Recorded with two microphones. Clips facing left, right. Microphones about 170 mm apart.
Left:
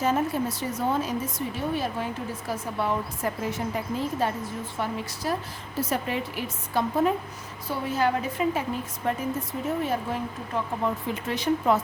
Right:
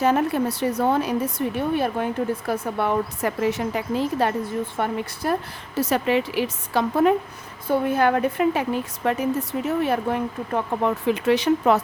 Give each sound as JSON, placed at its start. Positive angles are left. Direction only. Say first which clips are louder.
{"t": 0.0, "sound": "a woman's voice", "louder": "right 5 dB", "side_deg": -65}
{"t": 4.8, "sound": "a woman's voice", "louder": "right 1 dB", "side_deg": -55}
{"t": 7.7, "sound": "a woman's voice", "louder": "right 6 dB", "side_deg": -55}